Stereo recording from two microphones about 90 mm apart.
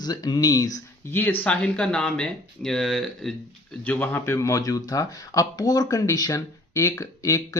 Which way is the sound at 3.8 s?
25° left (ahead or behind).